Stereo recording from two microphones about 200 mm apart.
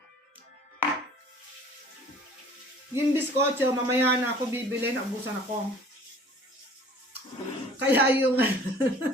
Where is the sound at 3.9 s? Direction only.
10° right (ahead or behind).